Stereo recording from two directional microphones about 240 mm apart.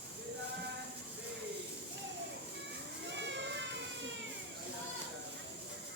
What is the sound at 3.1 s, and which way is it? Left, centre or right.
Cat, right.